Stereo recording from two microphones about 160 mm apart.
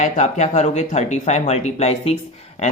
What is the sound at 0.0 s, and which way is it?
Speech, 45° left (ahead or behind).